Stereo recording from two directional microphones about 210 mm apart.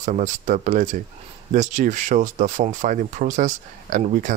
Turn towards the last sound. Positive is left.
turn(degrees=-35)  # may be behind; listen again after turning